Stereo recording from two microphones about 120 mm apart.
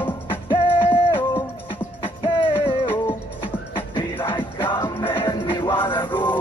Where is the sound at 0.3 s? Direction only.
45° left (ahead or behind).